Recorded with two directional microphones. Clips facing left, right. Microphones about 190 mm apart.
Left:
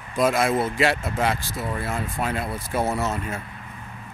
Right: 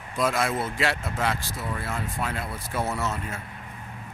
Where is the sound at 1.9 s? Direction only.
20° left (ahead or behind).